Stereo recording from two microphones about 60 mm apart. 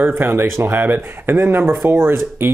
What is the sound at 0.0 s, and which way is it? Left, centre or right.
Speech, right.